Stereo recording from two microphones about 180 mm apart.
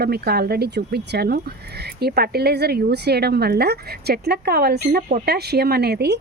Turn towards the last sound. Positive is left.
turn(degrees=-65)  # may be behind; listen again after turning